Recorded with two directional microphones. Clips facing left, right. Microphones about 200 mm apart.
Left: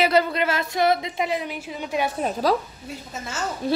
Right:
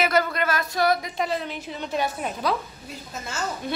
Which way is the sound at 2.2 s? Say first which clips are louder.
Left 5 dB; 35° left (ahead or behind).